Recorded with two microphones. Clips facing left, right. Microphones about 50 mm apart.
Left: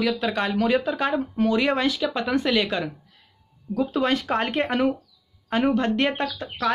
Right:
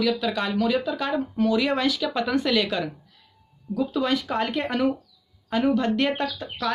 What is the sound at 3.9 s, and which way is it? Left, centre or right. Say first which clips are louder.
Speech: left 2 dB; left.